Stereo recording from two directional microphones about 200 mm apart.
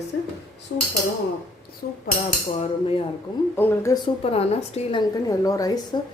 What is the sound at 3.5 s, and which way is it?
A woman's voice, 10° left (ahead or behind).